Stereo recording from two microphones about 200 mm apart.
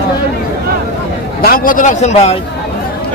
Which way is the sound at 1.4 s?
45° left (ahead or behind).